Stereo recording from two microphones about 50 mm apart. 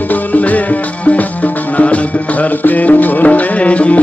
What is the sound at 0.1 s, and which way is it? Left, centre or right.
Music, left.